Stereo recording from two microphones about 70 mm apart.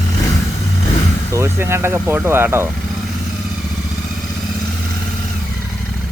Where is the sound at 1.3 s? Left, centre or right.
Right.